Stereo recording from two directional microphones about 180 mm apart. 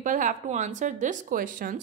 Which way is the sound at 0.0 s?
45° right (ahead or behind).